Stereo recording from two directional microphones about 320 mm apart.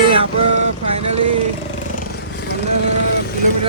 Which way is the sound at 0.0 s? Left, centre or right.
Centre.